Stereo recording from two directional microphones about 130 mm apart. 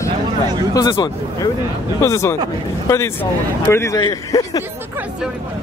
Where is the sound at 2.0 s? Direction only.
20° left (ahead or behind).